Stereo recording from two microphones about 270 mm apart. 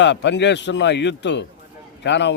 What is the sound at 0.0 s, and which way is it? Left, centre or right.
A man's voice, left.